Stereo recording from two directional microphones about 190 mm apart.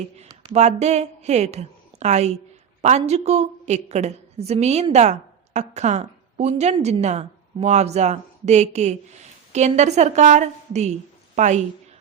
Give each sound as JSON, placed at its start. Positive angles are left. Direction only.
{"t": 0.0, "sound": "a woman's voice", "side_deg": -35}